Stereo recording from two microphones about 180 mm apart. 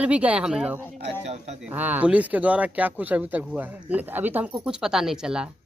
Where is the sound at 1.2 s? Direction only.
40° right (ahead or behind).